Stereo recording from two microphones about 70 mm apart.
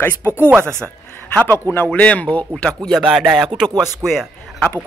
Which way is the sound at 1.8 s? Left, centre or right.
Centre.